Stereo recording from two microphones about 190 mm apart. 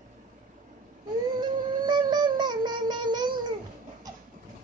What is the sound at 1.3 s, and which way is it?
Music, 25° right (ahead or behind).